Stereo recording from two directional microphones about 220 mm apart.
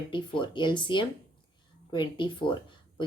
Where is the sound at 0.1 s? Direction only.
20° left (ahead or behind).